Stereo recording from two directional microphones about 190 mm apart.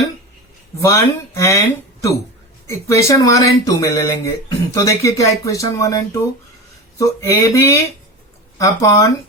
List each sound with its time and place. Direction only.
0.8 s speech: 15° left (ahead or behind)